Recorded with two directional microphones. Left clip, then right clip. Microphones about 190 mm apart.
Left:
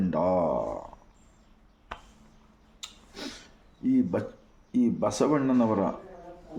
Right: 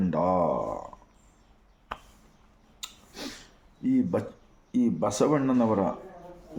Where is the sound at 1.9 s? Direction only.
25° right (ahead or behind).